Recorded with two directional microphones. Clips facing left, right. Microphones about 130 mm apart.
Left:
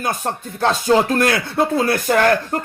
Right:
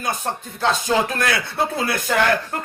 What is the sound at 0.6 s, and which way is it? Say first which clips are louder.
Speech: left 4 dB; 40° left (ahead or behind).